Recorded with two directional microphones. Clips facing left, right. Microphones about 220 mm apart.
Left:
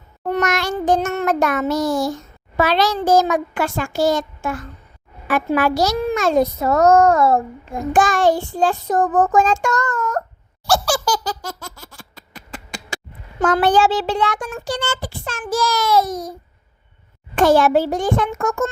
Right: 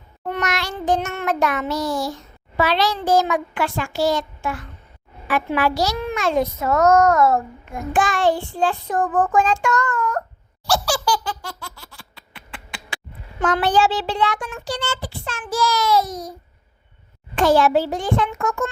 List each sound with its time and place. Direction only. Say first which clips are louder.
0.2 s child singing: left 5 dB; 45° left (ahead or behind)
10.7 s baby laughter: left 2 dB; 50° left (ahead or behind)
13.4 s child singing: left 3 dB; 50° left (ahead or behind)
17.3 s child singing: left 2 dB; 50° left (ahead or behind)